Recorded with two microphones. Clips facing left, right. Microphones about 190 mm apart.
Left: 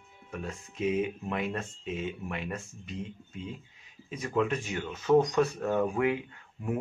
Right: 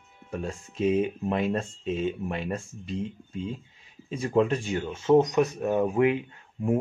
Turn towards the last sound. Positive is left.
turn(degrees=-25)  # may be behind; listen again after turning